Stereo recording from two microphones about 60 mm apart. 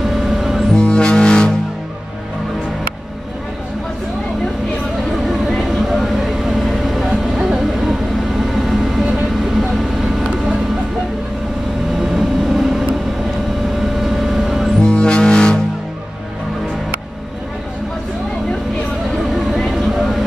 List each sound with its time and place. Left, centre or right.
0.2 s music: centre
0.7 s music: centre
5.2 s vehicle: centre
12.0 s vehicle: centre
14.0 s vehicle: centre
14.8 s music: centre
19.5 s vehicle: centre